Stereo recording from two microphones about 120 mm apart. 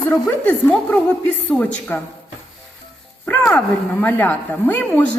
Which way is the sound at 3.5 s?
15° left (ahead or behind).